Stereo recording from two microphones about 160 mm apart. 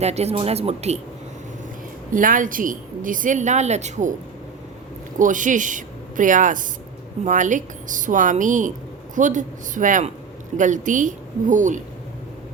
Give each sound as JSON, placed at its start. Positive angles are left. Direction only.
{"t": 0.0, "sound": "speech", "side_deg": -40}
{"t": 2.1, "sound": "a woman's voice", "side_deg": -55}
{"t": 5.2, "sound": "a woman's voice", "side_deg": -55}